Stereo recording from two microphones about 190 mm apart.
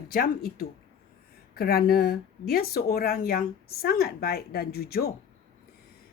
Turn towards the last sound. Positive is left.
turn(degrees=55)  # may be behind; listen again after turning